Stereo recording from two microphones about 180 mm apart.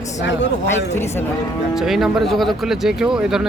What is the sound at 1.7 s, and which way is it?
Speech, centre (ahead or behind).